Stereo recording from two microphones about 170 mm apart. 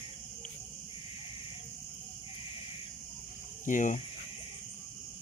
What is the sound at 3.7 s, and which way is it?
Speech, 50° left (ahead or behind).